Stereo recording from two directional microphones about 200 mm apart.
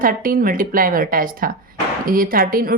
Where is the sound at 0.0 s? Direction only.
45° right (ahead or behind).